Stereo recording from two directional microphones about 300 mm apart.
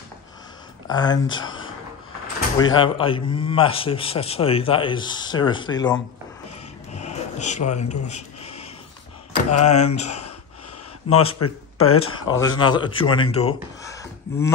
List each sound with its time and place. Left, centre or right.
0.8 s a man's voice: centre
2.6 s a man's voice: centre
7.0 s a sound: left
9.5 s a man's voice: left
9.9 s speech: left
11.1 s a man's voice: left
12.2 s speech: centre